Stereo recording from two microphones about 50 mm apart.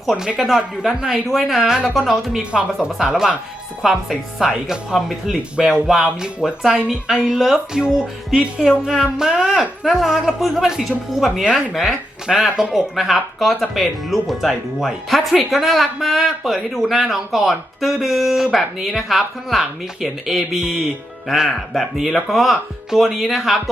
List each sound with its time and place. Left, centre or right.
0.0 s a woman's voice: centre
2.4 s a woman's voice: right; by 23.6 s centre